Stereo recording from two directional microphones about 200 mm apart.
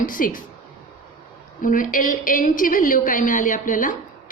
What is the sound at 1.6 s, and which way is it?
A woman's voice, 40° left (ahead or behind).